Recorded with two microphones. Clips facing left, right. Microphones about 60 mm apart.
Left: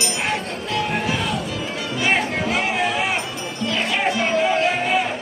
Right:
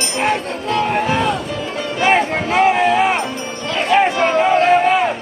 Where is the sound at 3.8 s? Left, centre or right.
Right.